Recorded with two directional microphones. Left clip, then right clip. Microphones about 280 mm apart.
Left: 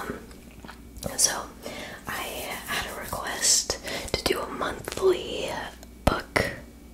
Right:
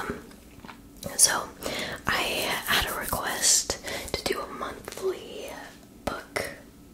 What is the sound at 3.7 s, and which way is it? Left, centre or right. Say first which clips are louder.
Whispering: left 1 dB; centre.